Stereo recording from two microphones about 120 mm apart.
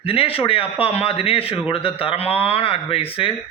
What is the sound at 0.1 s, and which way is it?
A man's voice, 50° left (ahead or behind).